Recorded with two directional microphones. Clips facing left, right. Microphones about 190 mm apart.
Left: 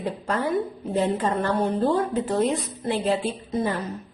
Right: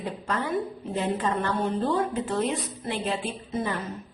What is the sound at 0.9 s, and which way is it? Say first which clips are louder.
A woman's voice: left 4 dB; 40° left (ahead or behind).